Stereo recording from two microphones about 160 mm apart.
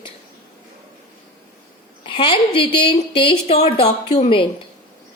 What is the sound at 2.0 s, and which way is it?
A woman's voice, 30° left (ahead or behind).